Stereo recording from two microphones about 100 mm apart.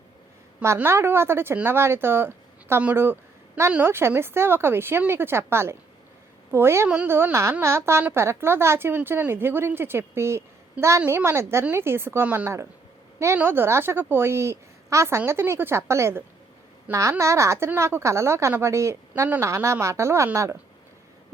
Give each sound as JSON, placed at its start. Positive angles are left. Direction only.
{"t": 0.6, "sound": "a woman's voice", "side_deg": -25}
{"t": 6.8, "sound": "speech", "side_deg": -10}
{"t": 7.1, "sound": "a woman's voice", "side_deg": -20}